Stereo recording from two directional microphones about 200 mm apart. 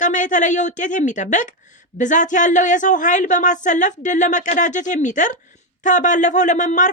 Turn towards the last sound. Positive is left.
turn(degrees=40)  # may be behind; listen again after turning